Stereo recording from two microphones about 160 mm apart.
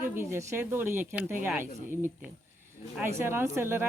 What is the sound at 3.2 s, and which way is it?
Speech, 15° right (ahead or behind).